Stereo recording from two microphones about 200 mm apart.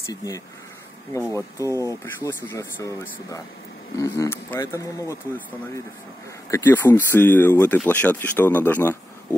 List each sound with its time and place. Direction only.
0.0 s speech: 15° left (ahead or behind)
6.5 s speech: 10° left (ahead or behind)